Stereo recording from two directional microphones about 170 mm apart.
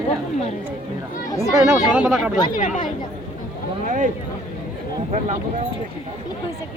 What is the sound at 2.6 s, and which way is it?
Speech, 45° left (ahead or behind).